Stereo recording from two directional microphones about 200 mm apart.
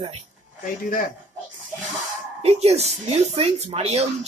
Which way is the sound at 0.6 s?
45° left (ahead or behind).